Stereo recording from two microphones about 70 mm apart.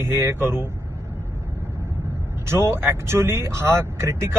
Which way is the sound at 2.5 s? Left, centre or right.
Right.